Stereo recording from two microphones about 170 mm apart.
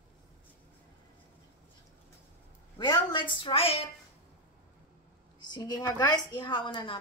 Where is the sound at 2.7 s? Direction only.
25° left (ahead or behind).